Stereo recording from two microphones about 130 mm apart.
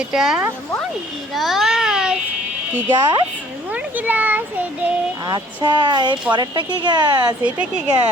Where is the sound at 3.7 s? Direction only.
10° right (ahead or behind).